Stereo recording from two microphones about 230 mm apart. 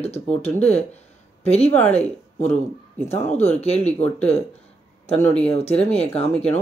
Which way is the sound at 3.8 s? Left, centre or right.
Centre.